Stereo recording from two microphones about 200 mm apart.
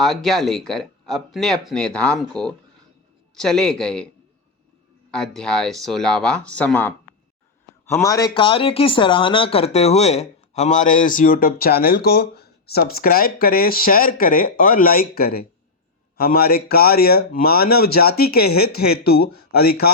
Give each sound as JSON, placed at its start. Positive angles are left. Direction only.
{"t": 0.0, "sound": "speech", "side_deg": 0}
{"t": 5.1, "sound": "speech", "side_deg": 5}